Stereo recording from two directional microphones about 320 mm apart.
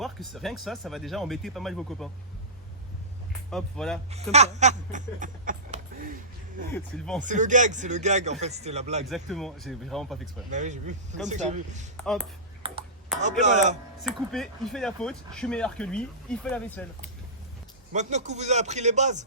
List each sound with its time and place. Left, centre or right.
0.0 s speech: centre
3.5 s speech: centre
4.1 s a sound: centre
6.7 s speech: centre
7.2 s speech: right
9.0 s speech: centre
10.5 s speech: right
13.1 s speech: right
14.3 s speech: centre
17.9 s speech: right